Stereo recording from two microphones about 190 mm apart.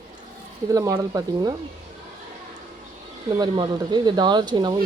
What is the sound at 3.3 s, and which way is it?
Speech, 25° right (ahead or behind).